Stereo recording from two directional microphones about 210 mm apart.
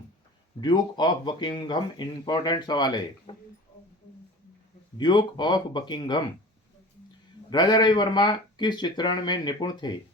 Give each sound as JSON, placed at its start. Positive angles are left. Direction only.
{"t": 0.6, "sound": "speech", "side_deg": 20}
{"t": 4.9, "sound": "speech", "side_deg": 20}
{"t": 7.5, "sound": "speech", "side_deg": 20}